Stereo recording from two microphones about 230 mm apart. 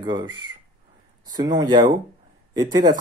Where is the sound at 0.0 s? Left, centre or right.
Centre.